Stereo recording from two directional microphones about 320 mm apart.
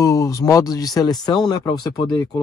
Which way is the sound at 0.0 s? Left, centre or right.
Centre.